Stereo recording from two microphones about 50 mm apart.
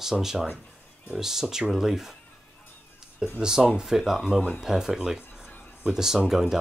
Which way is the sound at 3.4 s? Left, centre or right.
Centre.